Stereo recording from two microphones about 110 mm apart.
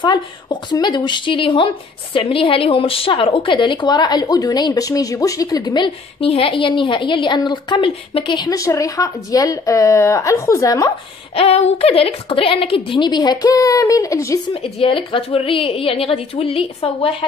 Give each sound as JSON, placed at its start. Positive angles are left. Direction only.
{"t": 0.0, "sound": "a woman's voice", "side_deg": 40}
{"t": 6.2, "sound": "a woman's voice", "side_deg": 60}
{"t": 8.5, "sound": "speech", "side_deg": 30}
{"t": 11.3, "sound": "a woman's voice", "side_deg": 70}
{"t": 14.5, "sound": "a woman's voice", "side_deg": 55}